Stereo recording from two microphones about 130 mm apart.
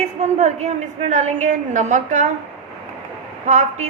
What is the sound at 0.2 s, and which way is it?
A woman's voice, 60° right (ahead or behind).